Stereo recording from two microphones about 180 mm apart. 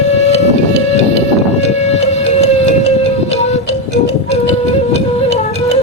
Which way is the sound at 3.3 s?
40° left (ahead or behind).